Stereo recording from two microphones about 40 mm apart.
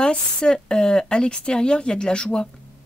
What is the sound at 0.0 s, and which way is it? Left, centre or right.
Speech, left.